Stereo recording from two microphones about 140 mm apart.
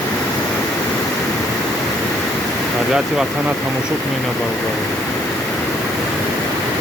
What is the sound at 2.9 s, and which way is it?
Speech, 5° right (ahead or behind).